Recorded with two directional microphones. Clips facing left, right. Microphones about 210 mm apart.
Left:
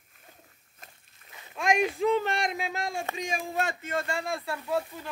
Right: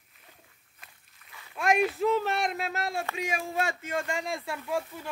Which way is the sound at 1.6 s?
5° right (ahead or behind).